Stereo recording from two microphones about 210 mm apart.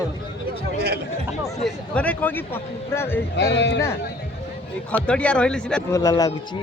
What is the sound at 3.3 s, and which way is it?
Speech, 55° left (ahead or behind).